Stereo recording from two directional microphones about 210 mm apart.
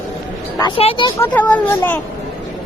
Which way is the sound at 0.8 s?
25° left (ahead or behind).